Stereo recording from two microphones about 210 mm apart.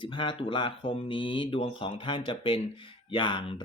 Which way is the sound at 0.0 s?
25° left (ahead or behind).